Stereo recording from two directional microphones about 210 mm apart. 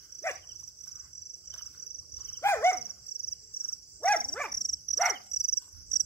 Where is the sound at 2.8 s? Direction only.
50° left (ahead or behind).